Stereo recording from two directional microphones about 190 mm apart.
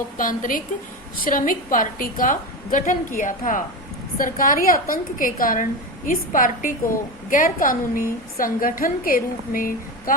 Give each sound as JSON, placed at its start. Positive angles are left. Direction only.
{"t": 0.2, "sound": "a woman's voice", "side_deg": 45}